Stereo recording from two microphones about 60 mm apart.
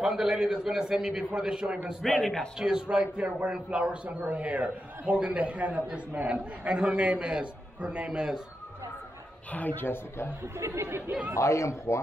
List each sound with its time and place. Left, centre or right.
0.0 s a man's voice: centre
2.0 s speech: centre
2.6 s a man's voice: centre
9.5 s speech: left
10.6 s speech: right
11.3 s a man's voice: left